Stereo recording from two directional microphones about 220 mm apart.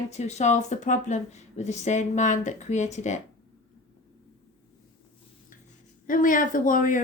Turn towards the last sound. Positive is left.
turn(degrees=35)  # may be behind; listen again after turning